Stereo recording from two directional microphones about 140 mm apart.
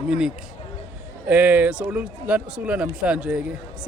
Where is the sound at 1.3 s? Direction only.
10° right (ahead or behind).